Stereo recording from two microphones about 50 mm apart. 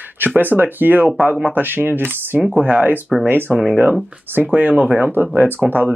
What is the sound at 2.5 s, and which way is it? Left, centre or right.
Speech, right.